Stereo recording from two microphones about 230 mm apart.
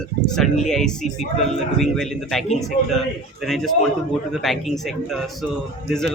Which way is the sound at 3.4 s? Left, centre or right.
Centre.